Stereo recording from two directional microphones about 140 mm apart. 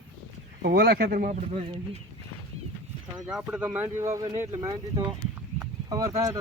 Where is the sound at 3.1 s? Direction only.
5° right (ahead or behind).